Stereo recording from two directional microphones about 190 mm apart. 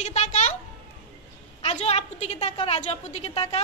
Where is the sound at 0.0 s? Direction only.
35° left (ahead or behind).